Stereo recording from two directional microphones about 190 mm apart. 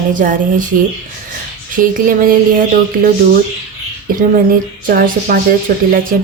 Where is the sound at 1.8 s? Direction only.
45° right (ahead or behind).